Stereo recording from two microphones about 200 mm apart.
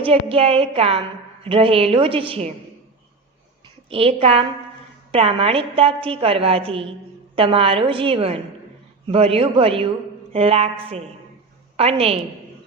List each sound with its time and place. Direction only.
0.0 s a woman's voice: 30° right (ahead or behind)
3.8 s a woman's voice: 30° right (ahead or behind)